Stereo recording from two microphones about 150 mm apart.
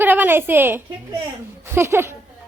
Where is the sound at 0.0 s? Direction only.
10° right (ahead or behind).